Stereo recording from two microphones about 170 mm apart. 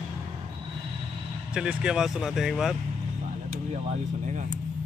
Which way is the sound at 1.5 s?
5° right (ahead or behind).